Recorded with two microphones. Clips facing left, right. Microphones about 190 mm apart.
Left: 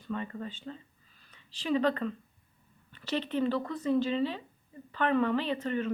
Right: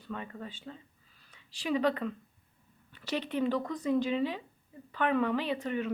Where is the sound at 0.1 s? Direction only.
5° right (ahead or behind).